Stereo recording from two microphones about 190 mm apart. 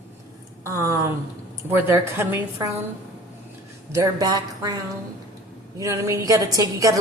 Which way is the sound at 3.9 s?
20° right (ahead or behind).